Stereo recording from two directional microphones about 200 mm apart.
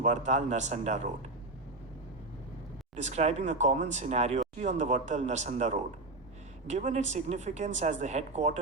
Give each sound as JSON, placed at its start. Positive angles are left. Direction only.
{"t": 0.0, "sound": "speech", "side_deg": -35}
{"t": 2.9, "sound": "speech", "side_deg": -35}